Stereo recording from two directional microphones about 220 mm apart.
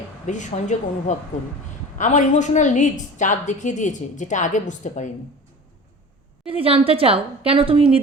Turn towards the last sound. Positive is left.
turn(degrees=-25)  # may be behind; listen again after turning